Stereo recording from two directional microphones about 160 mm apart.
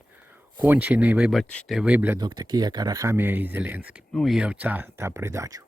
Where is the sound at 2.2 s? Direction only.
25° right (ahead or behind).